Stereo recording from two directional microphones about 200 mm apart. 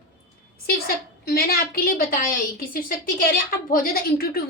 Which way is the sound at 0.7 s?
50° left (ahead or behind).